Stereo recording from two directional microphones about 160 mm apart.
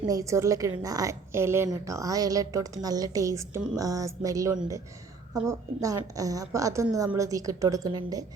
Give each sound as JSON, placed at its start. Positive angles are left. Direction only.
{"t": 0.1, "sound": "a woman's voice", "side_deg": -20}